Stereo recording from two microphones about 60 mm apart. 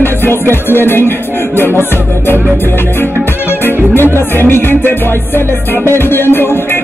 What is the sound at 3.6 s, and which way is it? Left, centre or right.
Music, left.